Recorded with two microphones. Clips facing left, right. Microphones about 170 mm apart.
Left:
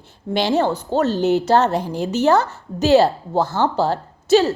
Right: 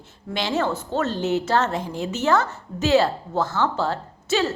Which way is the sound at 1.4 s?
35° left (ahead or behind).